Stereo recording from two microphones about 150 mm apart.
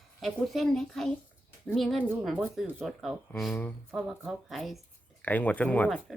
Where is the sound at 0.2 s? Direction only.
Centre (ahead or behind).